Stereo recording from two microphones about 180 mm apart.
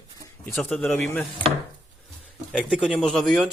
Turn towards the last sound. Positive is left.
turn(degrees=0)  # may be behind; listen again after turning